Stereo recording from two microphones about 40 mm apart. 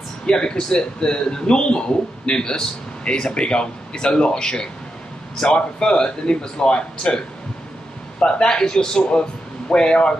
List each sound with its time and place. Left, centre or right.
0.3 s a man's voice: left